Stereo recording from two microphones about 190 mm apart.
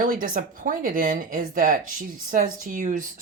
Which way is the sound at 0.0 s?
45° right (ahead or behind).